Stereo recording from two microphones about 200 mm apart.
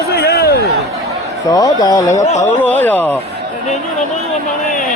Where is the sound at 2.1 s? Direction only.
35° left (ahead or behind).